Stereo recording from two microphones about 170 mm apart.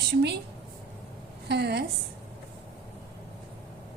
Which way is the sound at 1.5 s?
75° right (ahead or behind).